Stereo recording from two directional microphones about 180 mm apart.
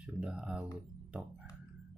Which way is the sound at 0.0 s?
5° right (ahead or behind).